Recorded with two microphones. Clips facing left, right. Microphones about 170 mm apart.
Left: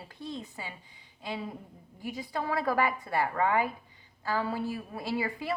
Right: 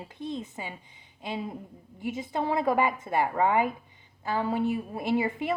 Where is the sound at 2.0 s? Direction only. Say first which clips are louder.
Right 4 dB; 20° right (ahead or behind).